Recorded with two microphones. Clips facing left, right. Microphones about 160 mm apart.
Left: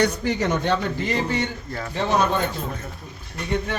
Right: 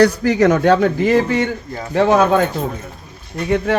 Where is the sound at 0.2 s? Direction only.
90° right.